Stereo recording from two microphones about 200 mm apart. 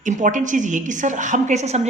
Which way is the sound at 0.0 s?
40° right (ahead or behind).